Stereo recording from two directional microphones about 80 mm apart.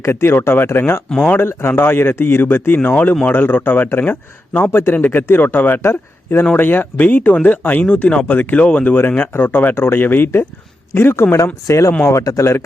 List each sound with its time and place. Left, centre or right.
0.0 s speech: left